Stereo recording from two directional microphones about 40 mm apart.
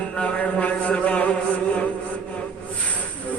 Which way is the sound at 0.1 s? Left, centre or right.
Left.